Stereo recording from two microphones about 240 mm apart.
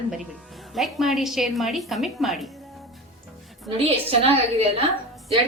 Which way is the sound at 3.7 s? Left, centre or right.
Right.